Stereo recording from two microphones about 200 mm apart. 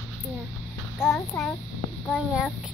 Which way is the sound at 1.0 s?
5° right (ahead or behind).